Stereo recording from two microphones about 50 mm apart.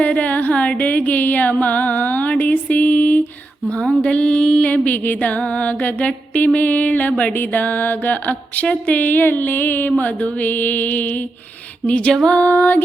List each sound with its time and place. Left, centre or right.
0.0 s music: left
2.6 s a sound: left
4.0 s music: left
4.7 s music: left